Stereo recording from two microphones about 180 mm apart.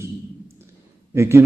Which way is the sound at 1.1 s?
15° right (ahead or behind).